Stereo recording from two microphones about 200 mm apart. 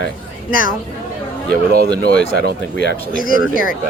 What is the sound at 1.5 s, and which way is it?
Speech, 50° right (ahead or behind).